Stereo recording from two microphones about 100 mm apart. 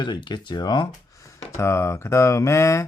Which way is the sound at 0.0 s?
50° left (ahead or behind).